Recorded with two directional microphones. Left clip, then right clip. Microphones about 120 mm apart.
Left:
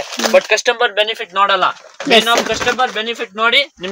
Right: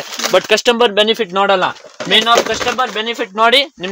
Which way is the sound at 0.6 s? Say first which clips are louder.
Right 3 dB; 90° right.